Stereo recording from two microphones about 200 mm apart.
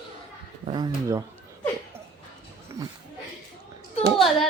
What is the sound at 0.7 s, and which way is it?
Speech, 20° right (ahead or behind).